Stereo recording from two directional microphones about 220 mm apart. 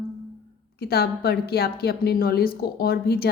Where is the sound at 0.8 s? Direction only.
45° left (ahead or behind).